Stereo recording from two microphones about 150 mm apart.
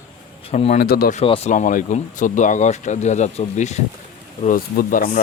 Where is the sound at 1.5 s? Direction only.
60° left (ahead or behind).